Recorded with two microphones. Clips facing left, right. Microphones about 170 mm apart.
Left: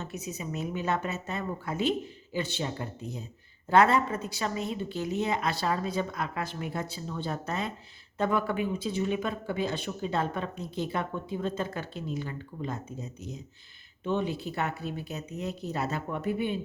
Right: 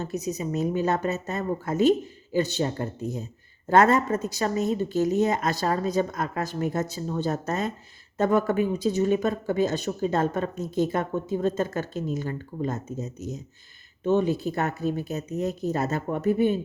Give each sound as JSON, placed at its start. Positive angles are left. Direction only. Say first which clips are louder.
{"t": 0.0, "sound": "a woman's voice", "louder": "right 8 dB", "side_deg": -40}